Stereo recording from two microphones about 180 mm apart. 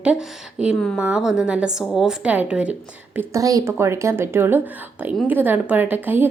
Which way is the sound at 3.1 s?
20° right (ahead or behind).